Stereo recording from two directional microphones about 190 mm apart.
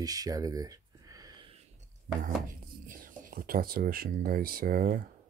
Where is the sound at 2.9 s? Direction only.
45° right (ahead or behind).